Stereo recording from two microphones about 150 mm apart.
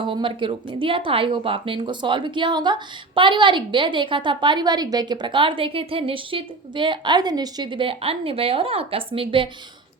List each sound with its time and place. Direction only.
0.0 s speech: 35° right (ahead or behind)